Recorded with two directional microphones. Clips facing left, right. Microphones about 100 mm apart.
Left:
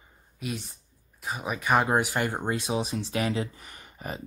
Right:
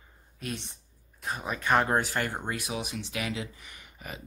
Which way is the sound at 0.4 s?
5° left (ahead or behind).